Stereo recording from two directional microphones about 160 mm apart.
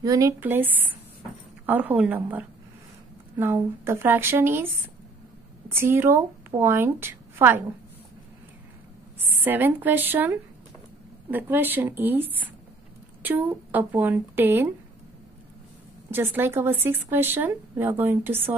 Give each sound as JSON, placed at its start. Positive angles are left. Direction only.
{"t": 0.0, "sound": "speech", "side_deg": -20}
{"t": 5.7, "sound": "a woman's voice", "side_deg": -15}
{"t": 9.2, "sound": "speech", "side_deg": -10}
{"t": 16.1, "sound": "speech", "side_deg": -15}